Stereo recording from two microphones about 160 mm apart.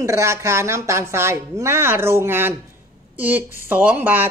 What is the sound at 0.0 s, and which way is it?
Speech, 20° right (ahead or behind).